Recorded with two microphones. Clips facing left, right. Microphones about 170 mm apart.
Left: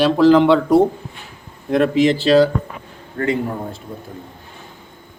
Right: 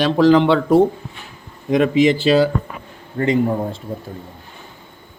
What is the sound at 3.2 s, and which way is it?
Speech, 20° right (ahead or behind).